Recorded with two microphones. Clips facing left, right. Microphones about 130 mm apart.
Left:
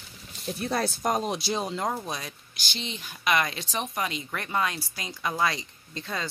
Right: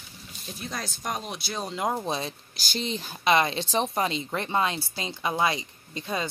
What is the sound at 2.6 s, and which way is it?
Speech, 40° right (ahead or behind).